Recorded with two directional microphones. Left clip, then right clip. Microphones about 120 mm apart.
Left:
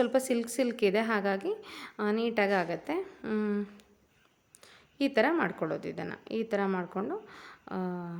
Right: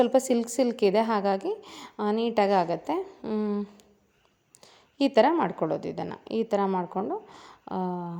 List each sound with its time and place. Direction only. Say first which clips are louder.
0.0 s a woman's voice: right 5 dB; 30° right (ahead or behind)
3.1 s speech: right 3 dB; 20° right (ahead or behind)
4.6 s a sound: right 5 dB; 35° right (ahead or behind)
5.3 s a woman's voice: right 4 dB; 25° right (ahead or behind)
6.7 s a woman's voice: right 5 dB; 20° right (ahead or behind)